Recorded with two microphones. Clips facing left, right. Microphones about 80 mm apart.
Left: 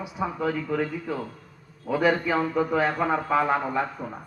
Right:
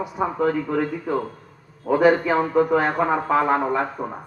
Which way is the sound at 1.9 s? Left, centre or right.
Right.